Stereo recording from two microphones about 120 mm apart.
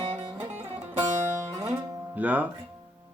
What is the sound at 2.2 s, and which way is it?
Speech, 15° right (ahead or behind).